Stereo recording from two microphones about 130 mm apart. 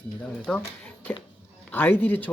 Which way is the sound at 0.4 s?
10° left (ahead or behind).